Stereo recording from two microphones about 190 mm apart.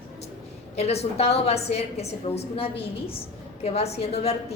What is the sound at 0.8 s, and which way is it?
A woman's voice, 35° left (ahead or behind).